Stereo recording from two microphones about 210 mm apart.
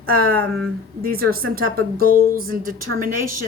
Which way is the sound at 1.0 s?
45° right (ahead or behind).